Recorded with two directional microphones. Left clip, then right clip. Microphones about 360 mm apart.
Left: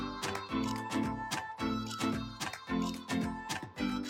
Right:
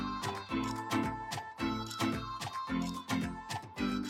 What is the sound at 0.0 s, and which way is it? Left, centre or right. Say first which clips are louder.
Music: even; centre.